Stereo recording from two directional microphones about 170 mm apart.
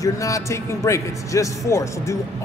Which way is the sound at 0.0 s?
20° left (ahead or behind).